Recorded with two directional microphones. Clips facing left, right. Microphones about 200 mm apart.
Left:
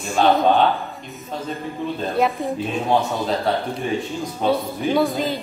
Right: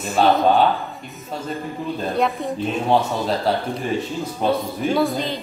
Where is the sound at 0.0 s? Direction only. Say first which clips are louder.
Even; centre (ahead or behind).